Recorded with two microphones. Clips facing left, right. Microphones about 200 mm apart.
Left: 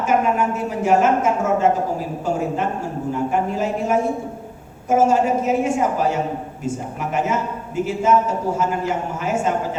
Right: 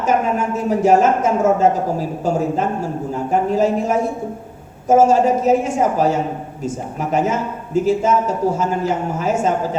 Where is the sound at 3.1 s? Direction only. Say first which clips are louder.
Right 3 dB; 40° right (ahead or behind).